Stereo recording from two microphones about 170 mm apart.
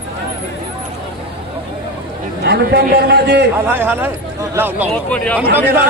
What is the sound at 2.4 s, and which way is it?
A man's voice, 70° right (ahead or behind).